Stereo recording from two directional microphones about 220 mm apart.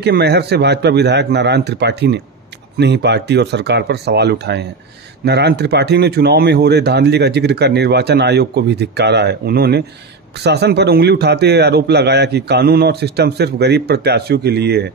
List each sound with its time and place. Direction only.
0.0 s speech: 45° right (ahead or behind)